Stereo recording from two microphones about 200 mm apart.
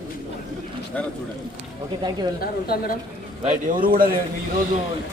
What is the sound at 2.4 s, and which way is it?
Speech, 50° left (ahead or behind).